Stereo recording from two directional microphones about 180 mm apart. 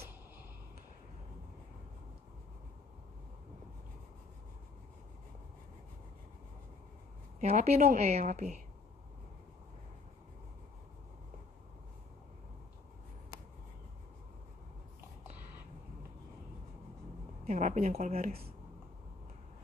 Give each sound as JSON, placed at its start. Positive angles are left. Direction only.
{"t": 7.3, "sound": "a woman's voice", "side_deg": -40}
{"t": 17.5, "sound": "a woman's voice", "side_deg": -40}